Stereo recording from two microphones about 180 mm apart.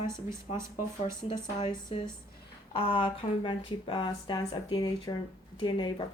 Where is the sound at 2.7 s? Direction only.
30° left (ahead or behind).